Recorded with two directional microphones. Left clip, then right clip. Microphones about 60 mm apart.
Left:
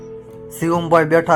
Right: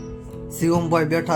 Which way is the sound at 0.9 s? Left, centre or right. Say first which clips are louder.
Left 7 dB; left.